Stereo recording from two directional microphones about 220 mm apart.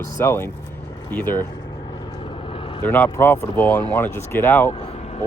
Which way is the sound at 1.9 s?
20° left (ahead or behind).